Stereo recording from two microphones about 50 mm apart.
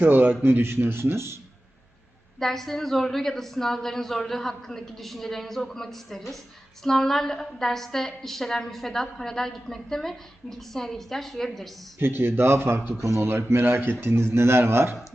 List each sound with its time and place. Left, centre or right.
0.0 s a man's voice: right
0.4 s speech: right
2.4 s a woman's voice: centre
11.9 s speech: right
13.0 s speech: right